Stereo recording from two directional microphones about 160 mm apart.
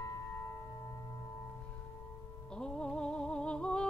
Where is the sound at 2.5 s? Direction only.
5° left (ahead or behind).